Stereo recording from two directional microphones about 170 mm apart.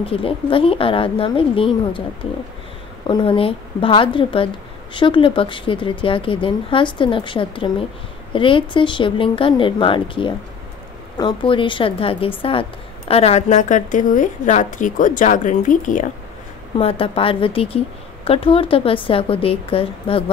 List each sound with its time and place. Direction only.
0.0 s speech: 30° left (ahead or behind)
3.1 s a woman's voice: 30° left (ahead or behind); by 16.1 s 50° left (ahead or behind)
16.7 s speech: 35° left (ahead or behind)